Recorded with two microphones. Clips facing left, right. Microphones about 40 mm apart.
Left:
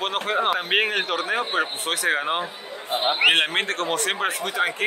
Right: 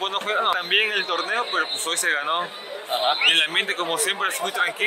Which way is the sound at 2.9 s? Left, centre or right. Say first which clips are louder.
Right 1 dB; right.